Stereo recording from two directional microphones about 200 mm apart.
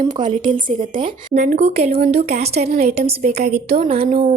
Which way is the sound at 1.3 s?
35° right (ahead or behind).